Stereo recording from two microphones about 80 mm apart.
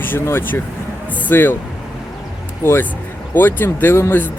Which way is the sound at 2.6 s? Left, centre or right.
Left.